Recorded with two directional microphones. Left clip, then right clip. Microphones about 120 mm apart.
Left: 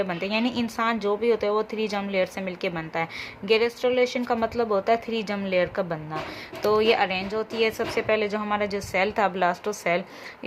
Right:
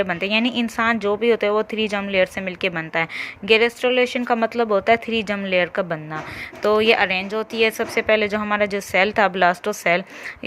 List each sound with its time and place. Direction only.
0.0 s speech: 40° right (ahead or behind)